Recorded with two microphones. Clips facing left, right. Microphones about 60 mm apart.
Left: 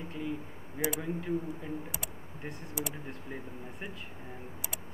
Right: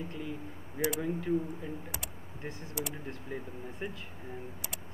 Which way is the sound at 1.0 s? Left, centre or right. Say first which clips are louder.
Right 2 dB; centre.